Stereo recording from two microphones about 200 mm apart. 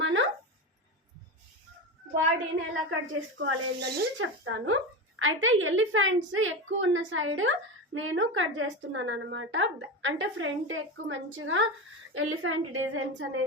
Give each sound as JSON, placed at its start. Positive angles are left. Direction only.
{"t": 0.0, "sound": "a sound", "side_deg": -70}
{"t": 2.9, "sound": "speech", "side_deg": -60}
{"t": 4.2, "sound": "a woman's voice", "side_deg": -80}
{"t": 12.1, "sound": "a woman's voice", "side_deg": -90}